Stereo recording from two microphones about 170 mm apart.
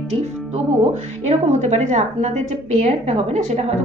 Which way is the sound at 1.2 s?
40° right (ahead or behind).